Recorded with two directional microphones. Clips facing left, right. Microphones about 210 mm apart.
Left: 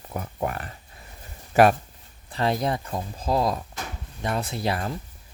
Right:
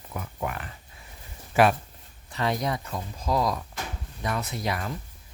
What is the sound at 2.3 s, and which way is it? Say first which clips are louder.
Speech: left 3 dB; 30° left (ahead or behind).